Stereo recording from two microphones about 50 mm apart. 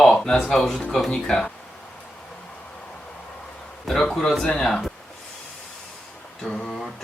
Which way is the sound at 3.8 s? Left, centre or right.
Centre.